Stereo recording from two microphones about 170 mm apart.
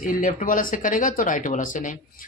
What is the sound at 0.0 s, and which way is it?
Speech, 50° left (ahead or behind).